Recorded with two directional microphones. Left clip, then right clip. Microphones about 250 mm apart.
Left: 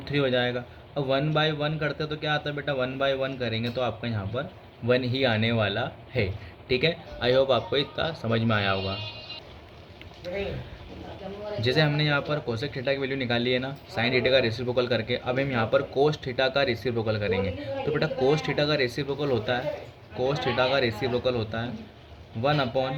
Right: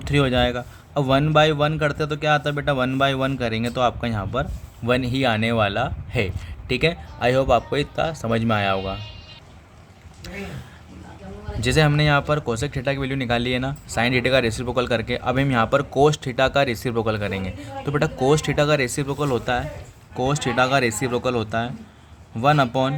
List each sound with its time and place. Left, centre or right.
0.0 s a man's voice: right
11.6 s a man's voice: right